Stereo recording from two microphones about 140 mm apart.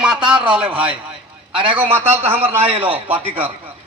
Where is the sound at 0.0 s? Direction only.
5° right (ahead or behind).